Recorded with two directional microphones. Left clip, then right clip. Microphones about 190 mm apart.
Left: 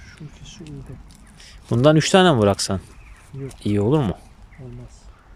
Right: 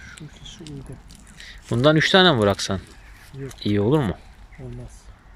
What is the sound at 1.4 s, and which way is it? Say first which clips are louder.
Speech: left 2 dB; 10° left (ahead or behind).